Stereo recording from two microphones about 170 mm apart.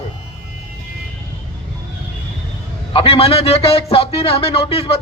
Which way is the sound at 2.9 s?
35° left (ahead or behind).